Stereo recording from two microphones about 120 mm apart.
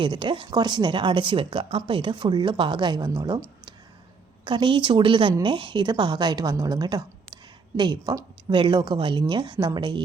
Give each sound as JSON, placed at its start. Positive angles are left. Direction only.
{"t": 0.0, "sound": "speech", "side_deg": -40}